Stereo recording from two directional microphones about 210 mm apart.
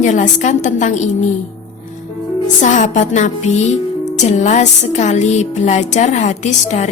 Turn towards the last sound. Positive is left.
turn(degrees=35)  # may be behind; listen again after turning